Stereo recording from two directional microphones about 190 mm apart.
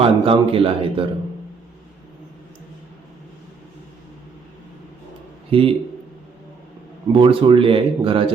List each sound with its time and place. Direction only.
0.0 s speech: 30° right (ahead or behind)
5.5 s a man's voice: 30° right (ahead or behind)
7.1 s speech: 30° right (ahead or behind)